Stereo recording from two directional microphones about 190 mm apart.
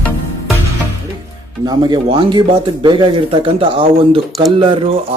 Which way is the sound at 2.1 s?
25° right (ahead or behind).